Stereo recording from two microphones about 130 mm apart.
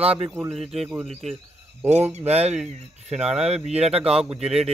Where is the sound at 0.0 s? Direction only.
50° right (ahead or behind).